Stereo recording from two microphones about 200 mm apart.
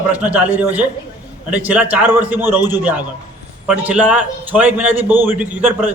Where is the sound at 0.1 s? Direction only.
5° right (ahead or behind).